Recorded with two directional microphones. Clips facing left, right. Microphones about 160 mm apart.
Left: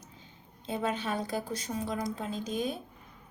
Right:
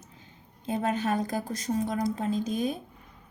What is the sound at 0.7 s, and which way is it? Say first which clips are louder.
A woman's voice: right 4 dB; 45° right (ahead or behind).